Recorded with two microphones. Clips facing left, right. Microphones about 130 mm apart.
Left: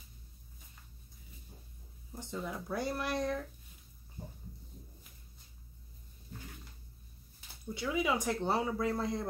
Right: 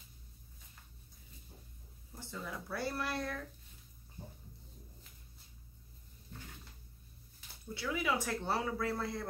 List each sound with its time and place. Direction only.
2.1 s speech: 20° left (ahead or behind)
7.7 s speech: 20° left (ahead or behind)